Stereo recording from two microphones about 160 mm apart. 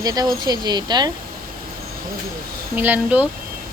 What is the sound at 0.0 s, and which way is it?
Speech, 25° right (ahead or behind).